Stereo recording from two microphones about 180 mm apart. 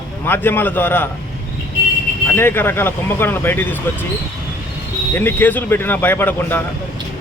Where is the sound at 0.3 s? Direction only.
10° left (ahead or behind).